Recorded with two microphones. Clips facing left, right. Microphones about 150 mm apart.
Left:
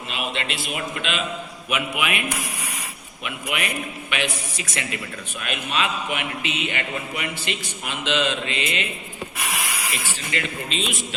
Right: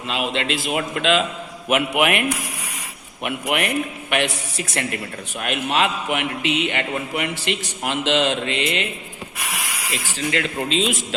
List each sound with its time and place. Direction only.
0.1 s a man's voice: 90° right
1.7 s a man's voice: 65° right (ahead or behind)
3.2 s a man's voice: 60° right (ahead or behind)
10.6 s a man's voice: 90° right